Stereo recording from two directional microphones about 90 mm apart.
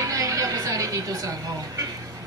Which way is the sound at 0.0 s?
40° right (ahead or behind).